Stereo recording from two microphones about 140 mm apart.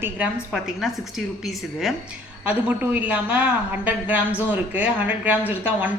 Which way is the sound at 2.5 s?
10° right (ahead or behind).